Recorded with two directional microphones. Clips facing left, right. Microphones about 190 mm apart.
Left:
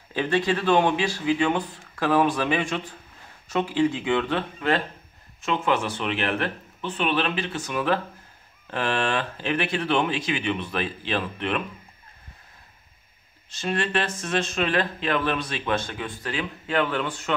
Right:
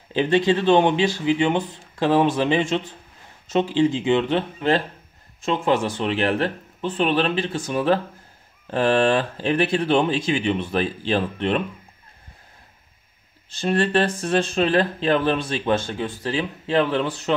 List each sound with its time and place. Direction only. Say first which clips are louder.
0.1 s speech: right 5 dB; 25° right (ahead or behind)
13.5 s speech: right 6 dB; 35° right (ahead or behind)